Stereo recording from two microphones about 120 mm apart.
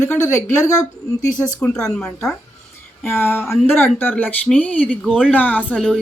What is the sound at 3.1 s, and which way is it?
Speech, 20° left (ahead or behind).